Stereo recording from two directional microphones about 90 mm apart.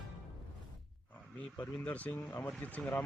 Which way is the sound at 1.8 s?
15° left (ahead or behind).